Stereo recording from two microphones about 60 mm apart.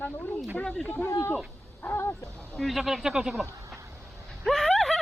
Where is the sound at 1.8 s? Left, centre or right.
Left.